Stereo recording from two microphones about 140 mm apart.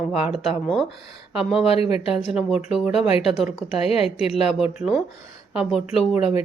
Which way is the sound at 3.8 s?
45° left (ahead or behind).